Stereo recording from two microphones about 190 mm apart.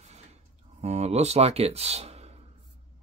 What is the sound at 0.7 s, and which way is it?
Speech, 35° right (ahead or behind).